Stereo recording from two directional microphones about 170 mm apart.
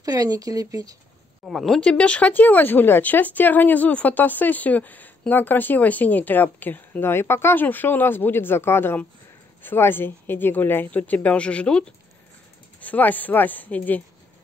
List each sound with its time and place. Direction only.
0.0 s speech: 20° right (ahead or behind)
1.4 s speech: centre (ahead or behind)